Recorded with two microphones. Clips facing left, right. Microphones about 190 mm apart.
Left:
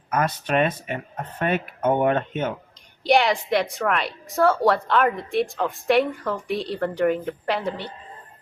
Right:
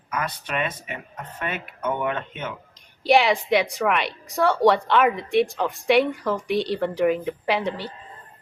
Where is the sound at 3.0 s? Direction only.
Centre (ahead or behind).